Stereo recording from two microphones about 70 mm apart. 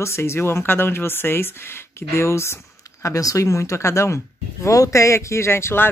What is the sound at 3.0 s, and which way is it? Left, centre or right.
Speech, left.